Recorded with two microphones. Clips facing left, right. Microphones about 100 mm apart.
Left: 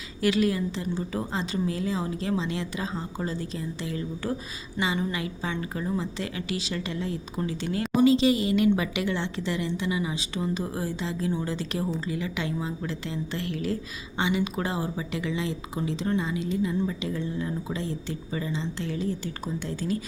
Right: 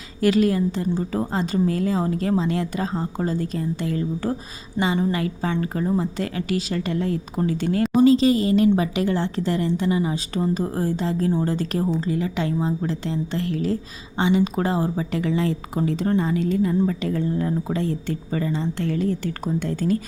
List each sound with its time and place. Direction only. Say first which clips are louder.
0.2 s a woman's voice: right 5 dB; 40° right (ahead or behind)